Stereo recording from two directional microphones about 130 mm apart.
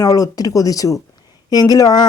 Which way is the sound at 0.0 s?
25° left (ahead or behind).